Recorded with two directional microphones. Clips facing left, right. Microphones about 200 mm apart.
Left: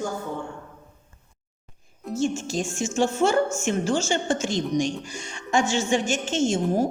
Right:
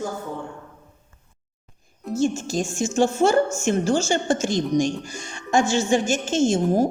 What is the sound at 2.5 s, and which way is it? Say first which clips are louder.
A woman's voice: right 3 dB; 40° right (ahead or behind).